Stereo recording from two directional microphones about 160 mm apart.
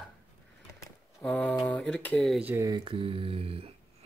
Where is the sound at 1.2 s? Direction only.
5° left (ahead or behind).